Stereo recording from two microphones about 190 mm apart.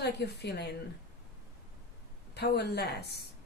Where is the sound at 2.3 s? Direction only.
60° left (ahead or behind).